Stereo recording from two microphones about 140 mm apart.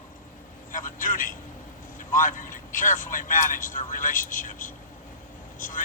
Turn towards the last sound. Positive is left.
turn(degrees=70)  # may be behind; listen again after turning